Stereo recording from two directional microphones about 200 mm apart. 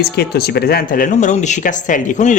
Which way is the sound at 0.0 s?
50° left (ahead or behind).